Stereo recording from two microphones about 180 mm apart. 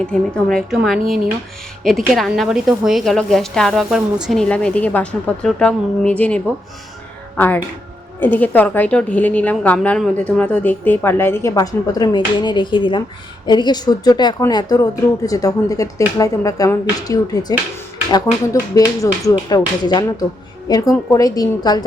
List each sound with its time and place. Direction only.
0.0 s a woman's voice: 5° left (ahead or behind)
18.7 s speech: 20° left (ahead or behind)